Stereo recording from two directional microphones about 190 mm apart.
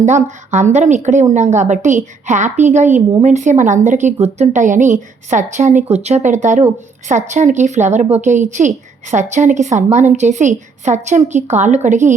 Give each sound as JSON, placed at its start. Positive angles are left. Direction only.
{"t": 0.0, "sound": "a woman's voice", "side_deg": -40}